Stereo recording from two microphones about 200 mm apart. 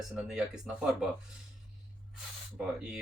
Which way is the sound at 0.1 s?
5° right (ahead or behind).